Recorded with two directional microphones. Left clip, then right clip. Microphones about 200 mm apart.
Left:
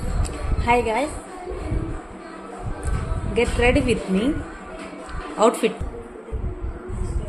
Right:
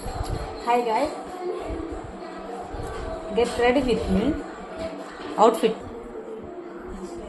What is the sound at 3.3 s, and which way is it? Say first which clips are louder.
Speech: left 1 dB; 30° left (ahead or behind).